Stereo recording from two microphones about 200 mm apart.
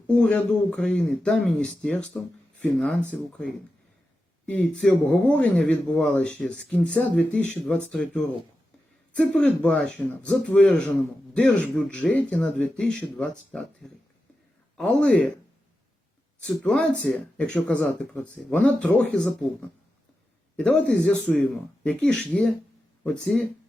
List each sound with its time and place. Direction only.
0.1 s speech: 5° left (ahead or behind)
16.4 s speech: 5° left (ahead or behind)
20.6 s speech: 5° left (ahead or behind)